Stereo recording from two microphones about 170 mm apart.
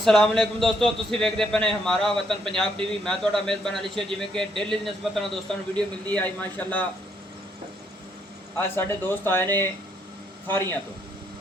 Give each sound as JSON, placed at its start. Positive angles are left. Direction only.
{"t": 0.0, "sound": "a man's voice", "side_deg": 0}
{"t": 8.5, "sound": "speech", "side_deg": 15}